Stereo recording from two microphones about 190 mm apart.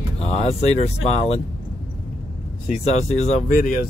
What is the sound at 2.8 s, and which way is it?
Speech, 35° left (ahead or behind).